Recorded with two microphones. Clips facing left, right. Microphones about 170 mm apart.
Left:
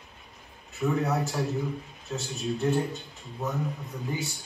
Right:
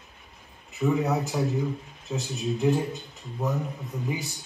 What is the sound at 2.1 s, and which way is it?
Speech, 20° right (ahead or behind).